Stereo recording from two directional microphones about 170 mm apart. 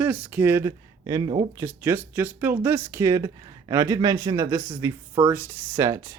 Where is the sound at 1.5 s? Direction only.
15° right (ahead or behind).